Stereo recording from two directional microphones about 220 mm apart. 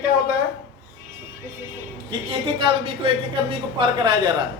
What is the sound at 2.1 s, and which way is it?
A woman's voice, 25° right (ahead or behind).